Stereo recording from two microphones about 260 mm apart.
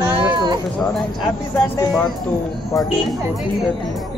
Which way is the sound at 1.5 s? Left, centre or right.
Centre.